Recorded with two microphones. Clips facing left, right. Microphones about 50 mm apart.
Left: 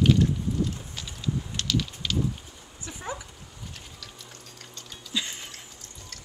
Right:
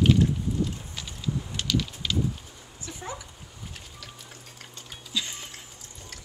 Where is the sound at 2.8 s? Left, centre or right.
Centre.